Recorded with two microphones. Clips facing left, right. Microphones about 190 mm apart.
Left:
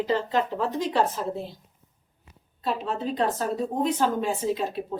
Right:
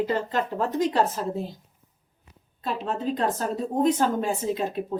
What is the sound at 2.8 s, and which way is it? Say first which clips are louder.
Speech: right 2 dB; 45° right (ahead or behind).